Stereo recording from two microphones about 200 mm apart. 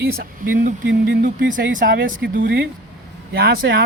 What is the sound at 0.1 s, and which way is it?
Speech, 45° right (ahead or behind).